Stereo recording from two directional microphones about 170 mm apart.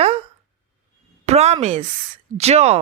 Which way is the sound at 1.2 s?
40° right (ahead or behind).